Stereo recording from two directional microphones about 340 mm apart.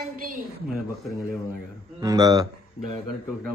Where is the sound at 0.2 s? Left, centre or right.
Right.